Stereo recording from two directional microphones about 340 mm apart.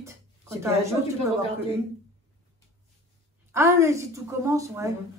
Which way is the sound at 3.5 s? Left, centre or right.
Centre.